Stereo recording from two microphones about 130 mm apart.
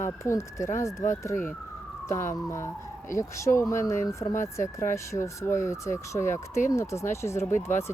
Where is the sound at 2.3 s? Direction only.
20° left (ahead or behind).